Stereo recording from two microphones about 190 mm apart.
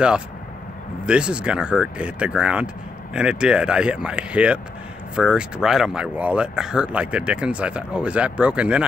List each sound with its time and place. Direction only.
1.0 s speech: 5° right (ahead or behind)